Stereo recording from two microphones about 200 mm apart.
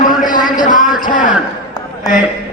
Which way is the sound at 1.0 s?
40° left (ahead or behind).